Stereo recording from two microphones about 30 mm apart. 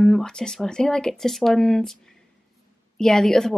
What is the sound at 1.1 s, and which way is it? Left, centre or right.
Speech, centre.